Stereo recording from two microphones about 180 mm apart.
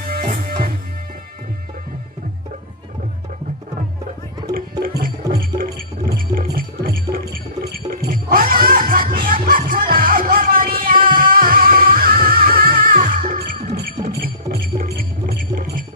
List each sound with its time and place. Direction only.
0.1 s music: 55° right (ahead or behind)
4.6 s music: 50° right (ahead or behind)